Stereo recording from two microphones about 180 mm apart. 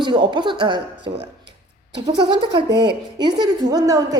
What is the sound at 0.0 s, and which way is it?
A woman's voice, 25° right (ahead or behind).